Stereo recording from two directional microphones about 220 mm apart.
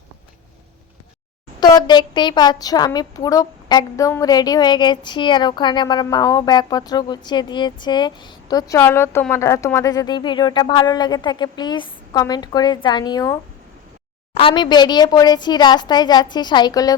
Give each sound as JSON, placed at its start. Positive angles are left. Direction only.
{"t": 1.6, "sound": "speech", "side_deg": 20}
{"t": 14.3, "sound": "speech", "side_deg": 25}